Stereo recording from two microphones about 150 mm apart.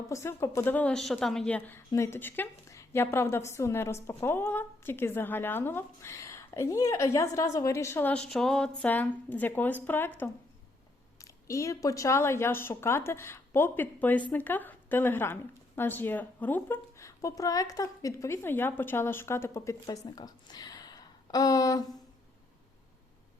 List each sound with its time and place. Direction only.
0.1 s a woman's voice: 20° left (ahead or behind)
11.4 s a woman's voice: 20° left (ahead or behind)